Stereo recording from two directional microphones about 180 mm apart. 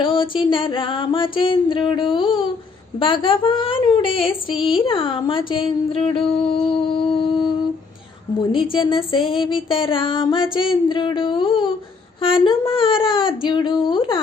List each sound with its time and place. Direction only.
0.0 s music: 30° left (ahead or behind)
4.5 s a woman's voice: centre (ahead or behind)
4.9 s music: 30° left (ahead or behind)
8.7 s music: 30° left (ahead or behind)